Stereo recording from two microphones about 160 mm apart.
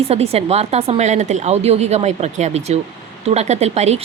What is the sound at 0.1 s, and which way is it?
A woman's voice, 40° right (ahead or behind).